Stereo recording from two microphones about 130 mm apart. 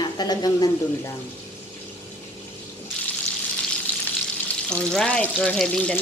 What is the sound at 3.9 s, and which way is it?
Frying, 10° left (ahead or behind).